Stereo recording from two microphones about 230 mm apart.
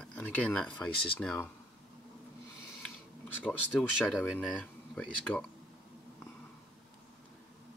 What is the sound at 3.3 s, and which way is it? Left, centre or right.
Speech, centre.